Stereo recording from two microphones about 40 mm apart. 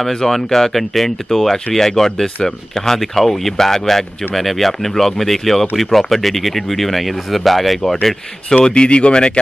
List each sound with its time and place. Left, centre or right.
0.0 s speech: centre
8.6 s speech: left